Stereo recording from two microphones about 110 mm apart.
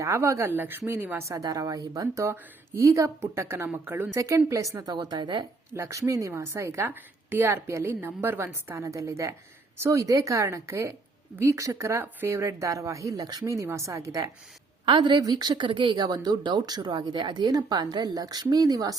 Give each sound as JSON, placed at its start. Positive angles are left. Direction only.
{"t": 0.0, "sound": "a woman's voice", "side_deg": -25}
{"t": 1.4, "sound": "a woman's voice", "side_deg": -30}
{"t": 5.7, "sound": "a woman's voice", "side_deg": -25}
{"t": 14.8, "sound": "a woman's voice", "side_deg": -45}